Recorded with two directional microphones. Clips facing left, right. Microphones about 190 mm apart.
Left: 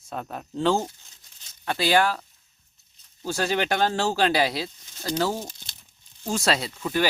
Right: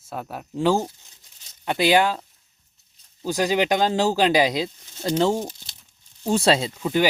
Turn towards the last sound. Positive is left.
turn(degrees=-20)  # may be behind; listen again after turning